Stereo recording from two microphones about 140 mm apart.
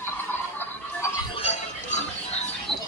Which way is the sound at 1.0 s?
20° left (ahead or behind).